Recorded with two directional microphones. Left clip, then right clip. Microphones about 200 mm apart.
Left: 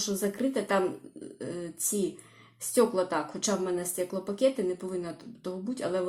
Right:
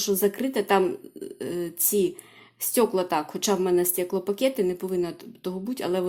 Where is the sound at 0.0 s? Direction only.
30° right (ahead or behind).